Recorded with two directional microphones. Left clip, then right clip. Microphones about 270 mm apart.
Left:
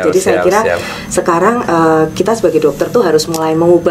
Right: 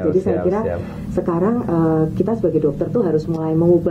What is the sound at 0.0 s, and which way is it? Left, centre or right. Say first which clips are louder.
Speech: left 8 dB; centre.